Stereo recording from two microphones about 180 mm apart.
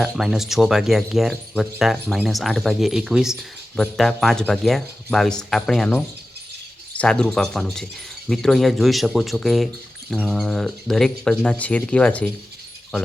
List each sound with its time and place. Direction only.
0.0 s speech: centre (ahead or behind)